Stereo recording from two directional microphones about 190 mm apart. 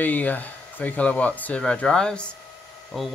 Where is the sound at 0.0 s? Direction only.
10° left (ahead or behind).